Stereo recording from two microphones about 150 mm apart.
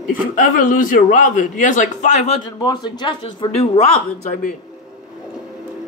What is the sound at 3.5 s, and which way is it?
Speech, 45° left (ahead or behind).